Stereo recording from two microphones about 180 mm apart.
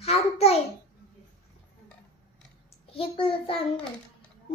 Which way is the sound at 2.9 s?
30° left (ahead or behind).